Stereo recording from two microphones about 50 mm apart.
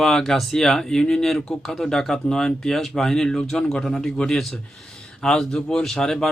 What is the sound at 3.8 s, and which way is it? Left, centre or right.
Speech, centre.